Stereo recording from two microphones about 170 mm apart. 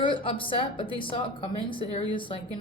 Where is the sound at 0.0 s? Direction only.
30° left (ahead or behind).